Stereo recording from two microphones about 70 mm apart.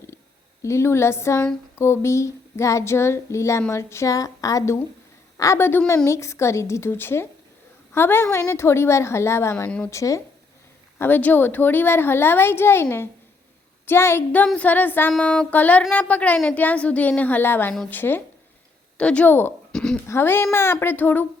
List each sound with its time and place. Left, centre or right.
0.6 s a woman's voice: left
1.8 s a sound: left
3.7 s a woman's voice: left
4.1 s a woman's voice: left
5.5 s a woman's voice: left
6.1 s a woman's voice: left
9.6 s speech: centre
9.9 s a sound: left
10.9 s a woman's voice: left
14.5 s a woman's voice: left
15.2 s a woman's voice: centre
18.9 s a woman's voice: centre
19.7 s speech: centre
20.1 s a woman's voice: left